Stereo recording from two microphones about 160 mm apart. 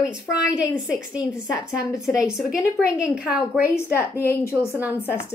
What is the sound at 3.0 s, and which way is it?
Speech, 5° right (ahead or behind).